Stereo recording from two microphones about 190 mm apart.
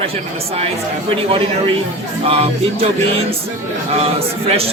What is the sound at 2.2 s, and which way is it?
Speech, 30° right (ahead or behind).